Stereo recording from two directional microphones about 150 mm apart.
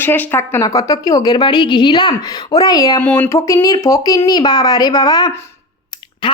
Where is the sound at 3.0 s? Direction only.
10° left (ahead or behind).